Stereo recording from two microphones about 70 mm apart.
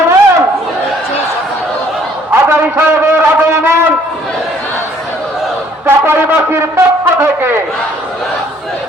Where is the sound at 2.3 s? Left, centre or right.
Right.